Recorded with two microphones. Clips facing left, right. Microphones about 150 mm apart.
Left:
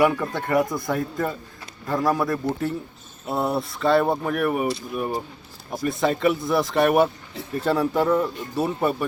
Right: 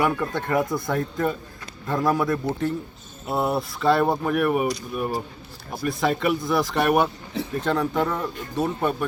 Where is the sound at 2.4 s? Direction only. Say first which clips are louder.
Left 1 dB; 20° right (ahead or behind).